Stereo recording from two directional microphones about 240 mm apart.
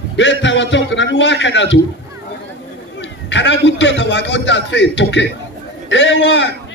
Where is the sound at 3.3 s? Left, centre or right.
Left.